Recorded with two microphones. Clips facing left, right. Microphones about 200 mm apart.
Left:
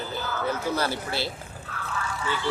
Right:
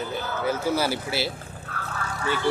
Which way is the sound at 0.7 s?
5° right (ahead or behind).